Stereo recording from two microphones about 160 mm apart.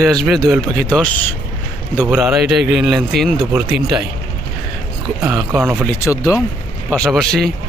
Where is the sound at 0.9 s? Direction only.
10° left (ahead or behind).